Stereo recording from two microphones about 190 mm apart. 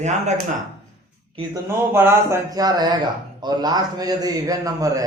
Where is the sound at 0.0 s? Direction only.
40° right (ahead or behind).